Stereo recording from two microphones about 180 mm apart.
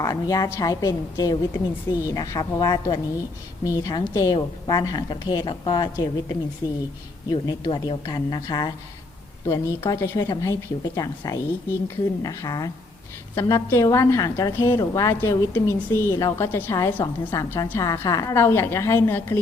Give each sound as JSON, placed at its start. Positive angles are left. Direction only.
{"t": 0.0, "sound": "a woman's voice", "side_deg": 20}